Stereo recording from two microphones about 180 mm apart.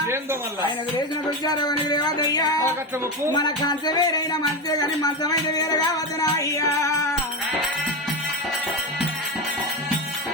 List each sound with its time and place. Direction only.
1.5 s music: 20° left (ahead or behind)